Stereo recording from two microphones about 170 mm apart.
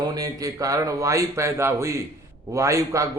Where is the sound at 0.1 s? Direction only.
20° right (ahead or behind).